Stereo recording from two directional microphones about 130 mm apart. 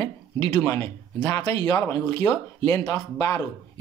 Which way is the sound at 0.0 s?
25° left (ahead or behind).